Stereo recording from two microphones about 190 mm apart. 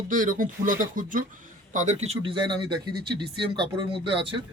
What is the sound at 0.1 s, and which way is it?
Speech, 45° right (ahead or behind).